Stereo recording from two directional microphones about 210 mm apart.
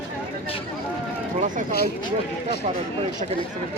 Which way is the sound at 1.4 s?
40° right (ahead or behind).